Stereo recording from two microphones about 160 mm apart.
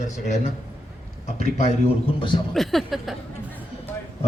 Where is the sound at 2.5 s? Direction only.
Centre (ahead or behind).